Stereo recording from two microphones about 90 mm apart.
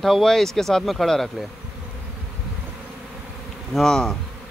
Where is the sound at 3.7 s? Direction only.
5° left (ahead or behind).